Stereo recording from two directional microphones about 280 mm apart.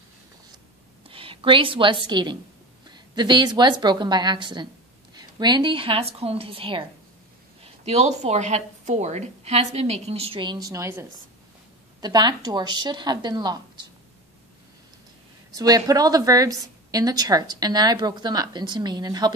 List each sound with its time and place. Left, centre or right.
1.0 s a woman's voice: centre
15.5 s a woman's voice: centre